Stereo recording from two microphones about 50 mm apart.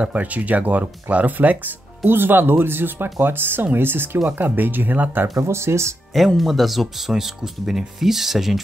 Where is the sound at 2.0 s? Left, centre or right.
Right.